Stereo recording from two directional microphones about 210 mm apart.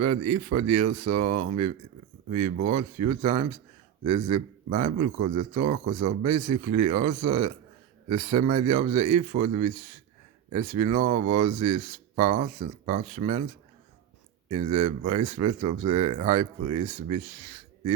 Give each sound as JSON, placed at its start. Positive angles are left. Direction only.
{"t": 0.2, "sound": "speech", "side_deg": -35}
{"t": 14.5, "sound": "speech", "side_deg": -30}